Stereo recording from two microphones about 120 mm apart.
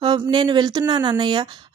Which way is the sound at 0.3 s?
40° right (ahead or behind).